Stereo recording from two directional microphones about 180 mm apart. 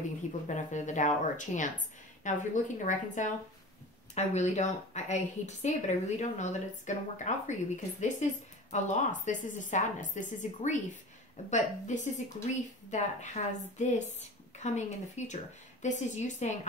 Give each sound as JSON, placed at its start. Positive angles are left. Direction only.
{"t": 0.5, "sound": "a woman's voice", "side_deg": 40}